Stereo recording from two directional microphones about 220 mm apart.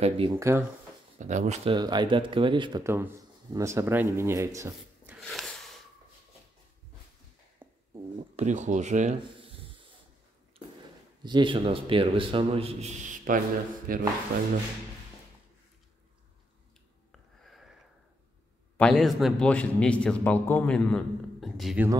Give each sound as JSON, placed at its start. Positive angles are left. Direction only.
{"t": 0.0, "sound": "a man's voice", "side_deg": -25}
{"t": 0.4, "sound": "speech", "side_deg": -10}
{"t": 1.1, "sound": "a man's voice", "side_deg": -35}
{"t": 5.2, "sound": "snort", "side_deg": 0}
{"t": 7.6, "sound": "dog", "side_deg": -10}
{"t": 8.4, "sound": "speech", "side_deg": -35}
{"t": 11.2, "sound": "a man's voice", "side_deg": -20}
{"t": 17.1, "sound": "a sound", "side_deg": 0}
{"t": 18.8, "sound": "a man's voice", "side_deg": 0}